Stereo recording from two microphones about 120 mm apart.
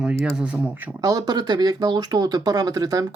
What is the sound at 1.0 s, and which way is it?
Speech, 30° right (ahead or behind).